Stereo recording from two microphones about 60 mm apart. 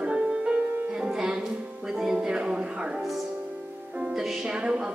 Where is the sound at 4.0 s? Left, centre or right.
Centre.